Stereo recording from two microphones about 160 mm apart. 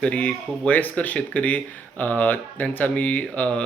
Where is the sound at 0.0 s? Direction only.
10° left (ahead or behind).